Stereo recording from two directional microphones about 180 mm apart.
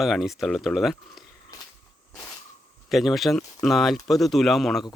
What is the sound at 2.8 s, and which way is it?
A man's voice, centre (ahead or behind).